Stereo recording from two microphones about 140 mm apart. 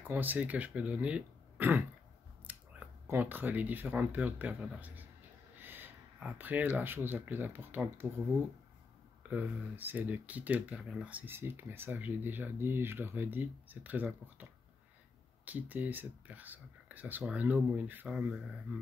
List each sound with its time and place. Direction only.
0.0 s speech: 15° right (ahead or behind)
9.3 s speech: 10° right (ahead or behind)